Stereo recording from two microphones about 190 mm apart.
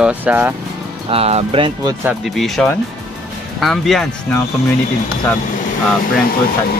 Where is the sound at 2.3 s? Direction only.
Centre (ahead or behind).